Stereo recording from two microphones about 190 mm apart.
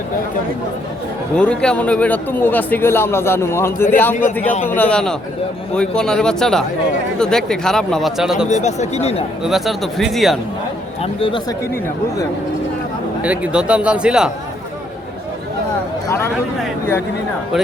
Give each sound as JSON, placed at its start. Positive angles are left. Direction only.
{"t": 1.4, "sound": "a man's voice", "side_deg": 5}
{"t": 8.6, "sound": "speech", "side_deg": 35}
{"t": 9.4, "sound": "a man's voice", "side_deg": 0}
{"t": 11.0, "sound": "speech", "side_deg": 30}
{"t": 13.2, "sound": "a man's voice", "side_deg": -5}
{"t": 16.0, "sound": "speech", "side_deg": 15}